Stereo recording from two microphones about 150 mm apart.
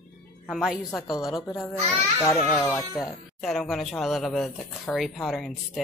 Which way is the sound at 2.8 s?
Centre (ahead or behind).